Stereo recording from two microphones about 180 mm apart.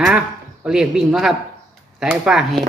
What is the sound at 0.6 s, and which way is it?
A man's voice, 5° right (ahead or behind).